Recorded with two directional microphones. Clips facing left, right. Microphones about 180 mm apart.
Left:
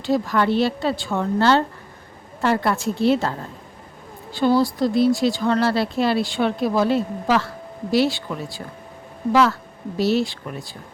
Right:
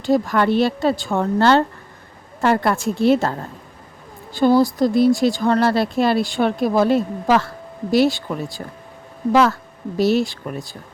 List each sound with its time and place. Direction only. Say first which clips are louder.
0.0 s speech: right 3 dB; 50° right (ahead or behind)
10.0 s speech: right 3 dB; 50° right (ahead or behind)